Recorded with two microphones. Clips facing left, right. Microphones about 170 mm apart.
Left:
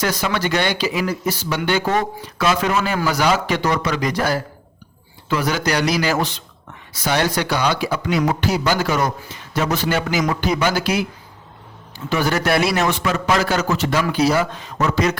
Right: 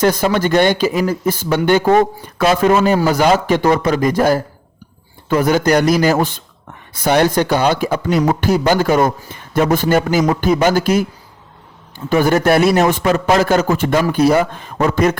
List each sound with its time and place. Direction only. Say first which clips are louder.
0.0 s a man's voice: right 7 dB; 50° right (ahead or behind)
3.2 s a man's voice: right 5 dB; 50° right (ahead or behind)
8.0 s a man's voice: right 3 dB; 35° right (ahead or behind)
8.3 s a man's voice: right 5 dB; 50° right (ahead or behind)